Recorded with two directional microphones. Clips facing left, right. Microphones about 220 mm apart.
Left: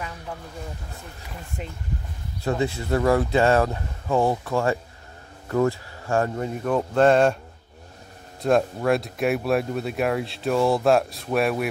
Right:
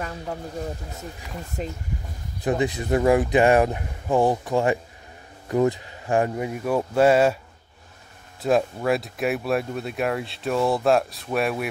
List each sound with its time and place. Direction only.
1.6 s speech: 35° right (ahead or behind)
2.4 s speech: 15° right (ahead or behind)
8.4 s speech: centre (ahead or behind)